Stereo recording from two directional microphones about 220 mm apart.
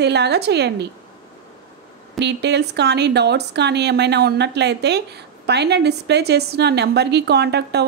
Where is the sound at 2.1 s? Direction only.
50° right (ahead or behind).